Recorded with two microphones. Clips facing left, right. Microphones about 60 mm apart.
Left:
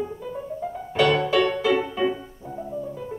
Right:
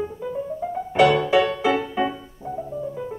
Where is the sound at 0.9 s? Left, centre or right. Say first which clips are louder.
Right 3 dB; centre.